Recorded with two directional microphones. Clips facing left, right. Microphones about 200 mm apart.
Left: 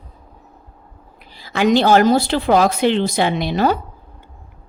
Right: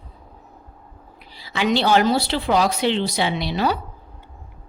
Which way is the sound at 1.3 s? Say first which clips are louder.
Left 6 dB; 50° left (ahead or behind).